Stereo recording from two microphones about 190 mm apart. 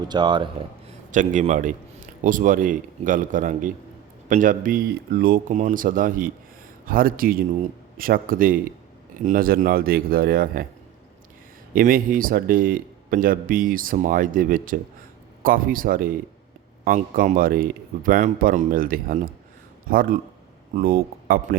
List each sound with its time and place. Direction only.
0.1 s speech: 25° right (ahead or behind)
1.1 s a man's voice: 40° right (ahead or behind)
11.7 s speech: 50° right (ahead or behind)